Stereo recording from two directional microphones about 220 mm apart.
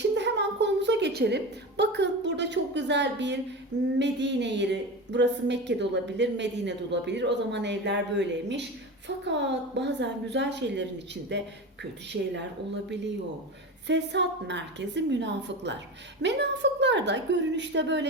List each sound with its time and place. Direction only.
0.2 s a woman's voice: 50° right (ahead or behind)
13.8 s a woman's voice: 55° right (ahead or behind)